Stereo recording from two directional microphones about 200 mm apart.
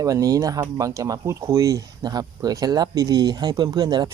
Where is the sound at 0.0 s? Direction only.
15° right (ahead or behind).